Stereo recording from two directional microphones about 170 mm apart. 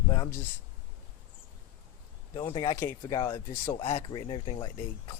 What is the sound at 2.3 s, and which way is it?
Speech, 25° left (ahead or behind).